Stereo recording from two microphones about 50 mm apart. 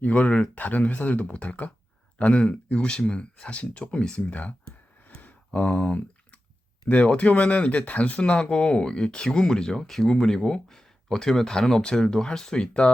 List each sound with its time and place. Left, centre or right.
0.0 s speech: left
5.0 s a sound: left
5.5 s speech: left